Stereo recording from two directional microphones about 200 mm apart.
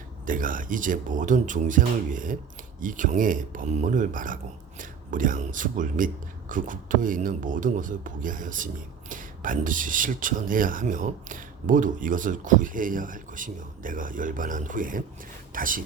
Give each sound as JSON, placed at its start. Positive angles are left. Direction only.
{"t": 0.3, "sound": "a man's voice", "side_deg": -40}